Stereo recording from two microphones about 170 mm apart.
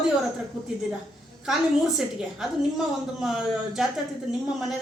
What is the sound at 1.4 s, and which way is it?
Speech, centre (ahead or behind).